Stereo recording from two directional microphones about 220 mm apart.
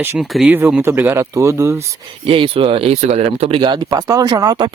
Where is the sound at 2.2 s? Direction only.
25° right (ahead or behind).